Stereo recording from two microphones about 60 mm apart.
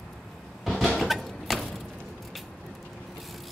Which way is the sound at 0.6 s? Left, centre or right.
Centre.